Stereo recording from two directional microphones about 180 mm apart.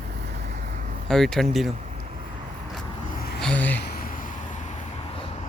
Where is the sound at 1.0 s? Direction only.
5° left (ahead or behind).